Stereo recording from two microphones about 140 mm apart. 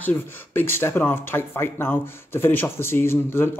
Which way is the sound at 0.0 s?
15° left (ahead or behind).